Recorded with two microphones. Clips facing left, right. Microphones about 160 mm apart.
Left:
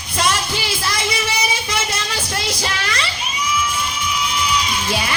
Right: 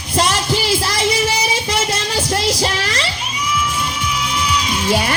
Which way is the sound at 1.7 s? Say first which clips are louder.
Right 4 dB; 40° right (ahead or behind).